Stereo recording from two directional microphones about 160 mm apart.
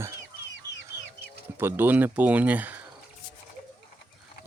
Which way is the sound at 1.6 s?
15° right (ahead or behind).